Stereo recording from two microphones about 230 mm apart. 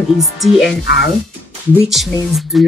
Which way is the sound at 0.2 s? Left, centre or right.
Centre.